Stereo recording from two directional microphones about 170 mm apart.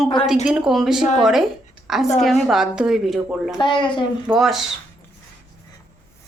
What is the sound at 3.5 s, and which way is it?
Speech, 30° left (ahead or behind).